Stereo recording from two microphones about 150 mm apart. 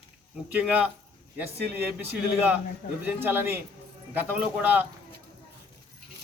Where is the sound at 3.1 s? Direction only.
15° right (ahead or behind).